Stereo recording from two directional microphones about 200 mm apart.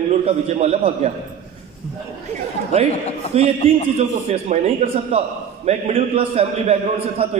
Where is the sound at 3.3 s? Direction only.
30° right (ahead or behind).